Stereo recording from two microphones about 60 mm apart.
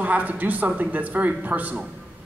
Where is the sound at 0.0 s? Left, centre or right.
Right.